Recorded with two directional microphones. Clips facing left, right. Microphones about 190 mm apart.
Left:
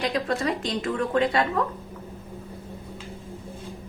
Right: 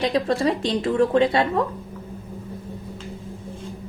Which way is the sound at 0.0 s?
30° right (ahead or behind).